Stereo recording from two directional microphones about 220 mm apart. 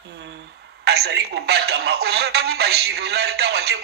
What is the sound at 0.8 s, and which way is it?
Speech, 50° right (ahead or behind).